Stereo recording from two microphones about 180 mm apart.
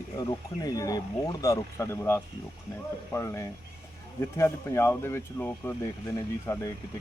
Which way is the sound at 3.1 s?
15° left (ahead or behind).